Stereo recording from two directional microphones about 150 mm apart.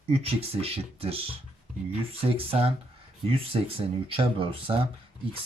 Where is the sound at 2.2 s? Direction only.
40° right (ahead or behind).